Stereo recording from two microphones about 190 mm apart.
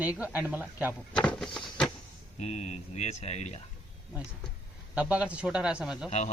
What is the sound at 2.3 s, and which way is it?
Speech, 35° left (ahead or behind).